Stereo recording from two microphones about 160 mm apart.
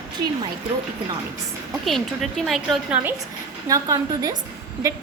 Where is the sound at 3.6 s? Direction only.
20° right (ahead or behind).